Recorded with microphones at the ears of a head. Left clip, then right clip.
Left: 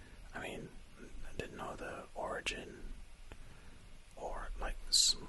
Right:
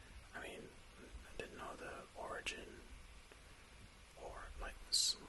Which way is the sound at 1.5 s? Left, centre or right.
Left.